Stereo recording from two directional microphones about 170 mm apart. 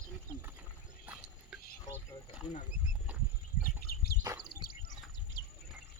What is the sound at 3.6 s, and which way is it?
Bird, 65° left (ahead or behind).